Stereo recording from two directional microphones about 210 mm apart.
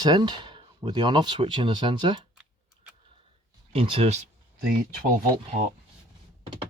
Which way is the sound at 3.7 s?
25° right (ahead or behind).